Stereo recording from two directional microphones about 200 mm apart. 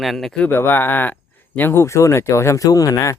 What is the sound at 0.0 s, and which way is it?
Speech, centre (ahead or behind).